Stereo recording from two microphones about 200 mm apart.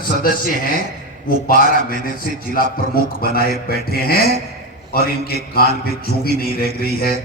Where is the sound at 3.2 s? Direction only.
50° left (ahead or behind).